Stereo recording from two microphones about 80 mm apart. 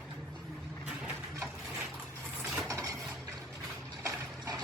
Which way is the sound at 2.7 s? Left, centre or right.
Right.